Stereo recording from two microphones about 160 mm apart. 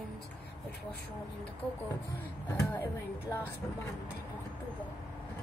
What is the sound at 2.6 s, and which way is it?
Speech, 15° left (ahead or behind).